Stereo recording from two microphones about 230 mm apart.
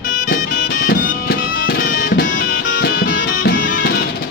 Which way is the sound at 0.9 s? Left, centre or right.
Left.